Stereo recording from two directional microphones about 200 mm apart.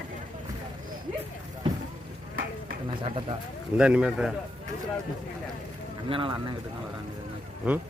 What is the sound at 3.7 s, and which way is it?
Speech, 5° right (ahead or behind).